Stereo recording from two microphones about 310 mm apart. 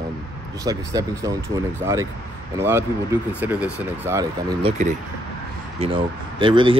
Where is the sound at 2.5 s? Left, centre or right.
Centre.